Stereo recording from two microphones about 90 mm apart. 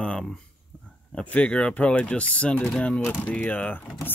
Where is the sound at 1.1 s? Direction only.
15° left (ahead or behind).